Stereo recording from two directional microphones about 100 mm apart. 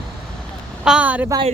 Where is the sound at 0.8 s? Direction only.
15° right (ahead or behind).